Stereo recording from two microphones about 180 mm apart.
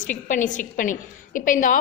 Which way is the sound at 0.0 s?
45° left (ahead or behind).